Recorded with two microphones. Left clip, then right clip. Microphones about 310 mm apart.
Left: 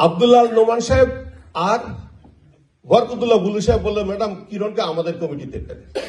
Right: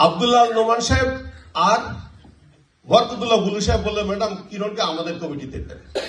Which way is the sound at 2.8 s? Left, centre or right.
Left.